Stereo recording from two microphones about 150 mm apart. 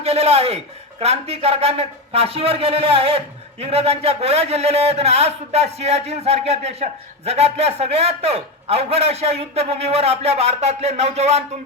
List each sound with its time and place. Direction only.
0.0 s a man's voice: 45° right (ahead or behind)